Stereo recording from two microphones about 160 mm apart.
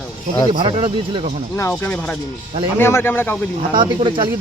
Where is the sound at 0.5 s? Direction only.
30° right (ahead or behind).